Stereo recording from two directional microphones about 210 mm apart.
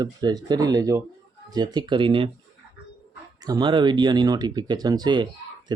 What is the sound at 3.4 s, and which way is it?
A child's voice, 20° right (ahead or behind).